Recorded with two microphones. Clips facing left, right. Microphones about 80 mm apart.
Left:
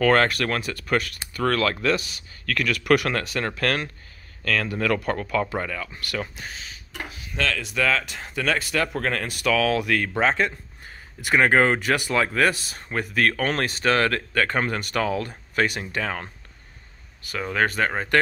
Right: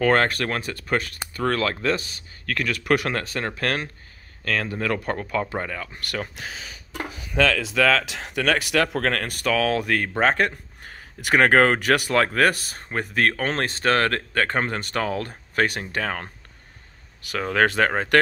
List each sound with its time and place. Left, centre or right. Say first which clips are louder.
0.0 s speech: left 1 dB; right
6.4 s speech: right 2 dB; right
7.7 s speech: right 3 dB; right
10.3 s speech: right 1 dB; right
12.7 s speech: even; right
17.2 s speech: right 3 dB; right